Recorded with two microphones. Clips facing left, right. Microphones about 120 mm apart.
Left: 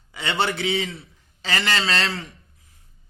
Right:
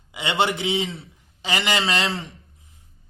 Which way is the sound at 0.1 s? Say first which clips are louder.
Right 2 dB; 15° right (ahead or behind).